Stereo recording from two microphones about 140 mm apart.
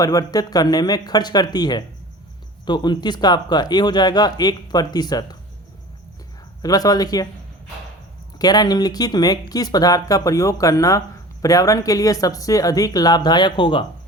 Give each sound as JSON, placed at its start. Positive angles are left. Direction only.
{"t": 0.0, "sound": "speech", "side_deg": 25}
{"t": 6.6, "sound": "speech", "side_deg": 25}
{"t": 8.4, "sound": "speech", "side_deg": 30}